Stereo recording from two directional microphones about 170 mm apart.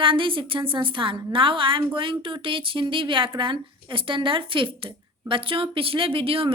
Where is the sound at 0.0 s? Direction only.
30° right (ahead or behind).